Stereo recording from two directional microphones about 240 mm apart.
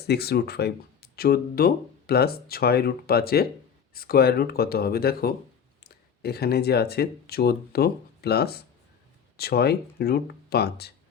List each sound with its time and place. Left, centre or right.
0.0 s speech: left